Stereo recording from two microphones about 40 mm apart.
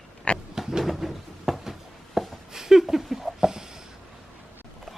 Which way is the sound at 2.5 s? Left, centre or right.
Centre.